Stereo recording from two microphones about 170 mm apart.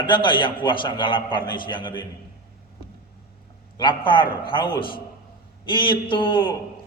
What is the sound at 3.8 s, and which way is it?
Speech, 30° left (ahead or behind).